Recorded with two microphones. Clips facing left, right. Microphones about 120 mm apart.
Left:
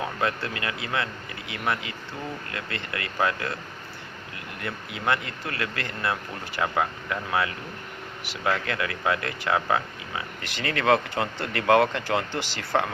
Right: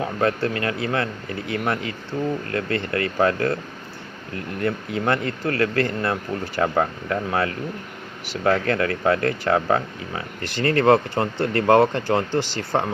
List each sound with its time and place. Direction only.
0.2 s speech: 40° right (ahead or behind)